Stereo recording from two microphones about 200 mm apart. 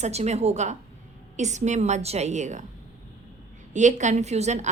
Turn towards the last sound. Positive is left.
turn(degrees=-35)  # may be behind; listen again after turning